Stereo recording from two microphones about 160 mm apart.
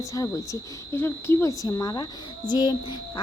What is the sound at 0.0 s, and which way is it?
Speech, 20° left (ahead or behind).